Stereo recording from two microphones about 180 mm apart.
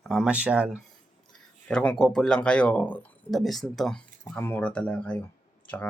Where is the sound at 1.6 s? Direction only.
5° left (ahead or behind).